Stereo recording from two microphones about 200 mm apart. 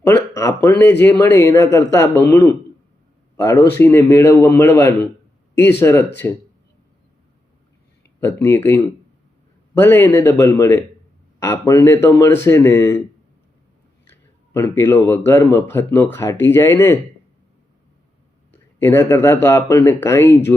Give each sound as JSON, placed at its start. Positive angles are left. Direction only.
{"t": 0.1, "sound": "speech", "side_deg": 15}
{"t": 8.2, "sound": "speech", "side_deg": 10}
{"t": 14.1, "sound": "speech", "side_deg": 15}
{"t": 18.8, "sound": "speech", "side_deg": 10}